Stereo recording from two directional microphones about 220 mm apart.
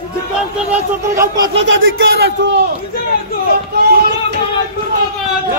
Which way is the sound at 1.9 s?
50° right (ahead or behind).